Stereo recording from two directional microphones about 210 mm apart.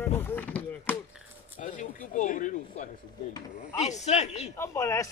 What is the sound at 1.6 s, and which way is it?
Speech, 35° left (ahead or behind).